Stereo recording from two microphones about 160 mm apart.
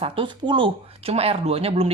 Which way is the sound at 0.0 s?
30° right (ahead or behind).